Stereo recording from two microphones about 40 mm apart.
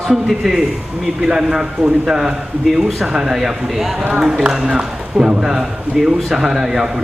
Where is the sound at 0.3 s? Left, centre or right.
Centre.